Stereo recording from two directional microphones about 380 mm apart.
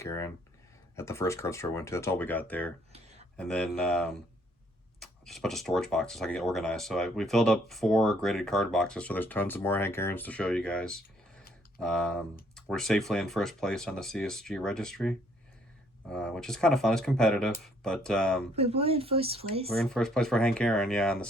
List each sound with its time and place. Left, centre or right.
0.0 s speech: centre
18.5 s speech: centre
19.7 s speech: centre